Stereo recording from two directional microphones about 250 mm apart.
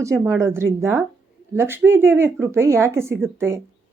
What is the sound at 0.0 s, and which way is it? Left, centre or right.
Speech, centre.